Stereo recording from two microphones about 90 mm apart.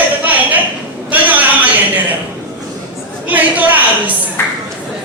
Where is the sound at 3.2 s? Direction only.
20° right (ahead or behind).